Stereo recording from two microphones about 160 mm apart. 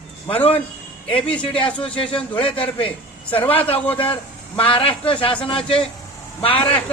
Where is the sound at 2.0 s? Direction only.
35° left (ahead or behind).